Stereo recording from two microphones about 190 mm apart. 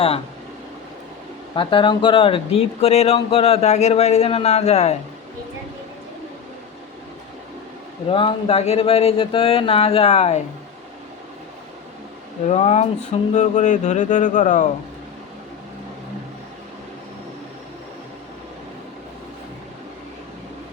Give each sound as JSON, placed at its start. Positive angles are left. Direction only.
{"t": 1.5, "sound": "speech", "side_deg": 25}
{"t": 8.1, "sound": "speech", "side_deg": 25}
{"t": 12.5, "sound": "speech", "side_deg": 35}